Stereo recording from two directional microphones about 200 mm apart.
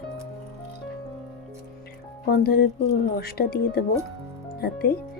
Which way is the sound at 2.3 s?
50° left (ahead or behind).